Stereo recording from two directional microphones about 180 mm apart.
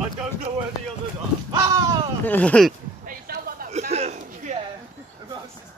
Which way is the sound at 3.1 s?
55° right (ahead or behind).